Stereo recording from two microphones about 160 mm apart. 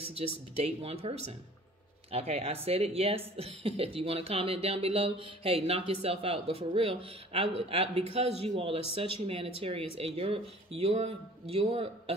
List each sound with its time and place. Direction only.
0.0 s speech: 35° right (ahead or behind)